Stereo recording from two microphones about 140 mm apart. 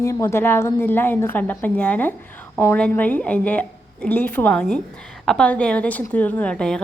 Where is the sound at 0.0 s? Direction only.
20° left (ahead or behind).